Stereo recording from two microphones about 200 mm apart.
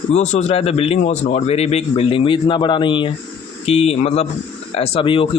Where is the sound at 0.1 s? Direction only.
35° left (ahead or behind).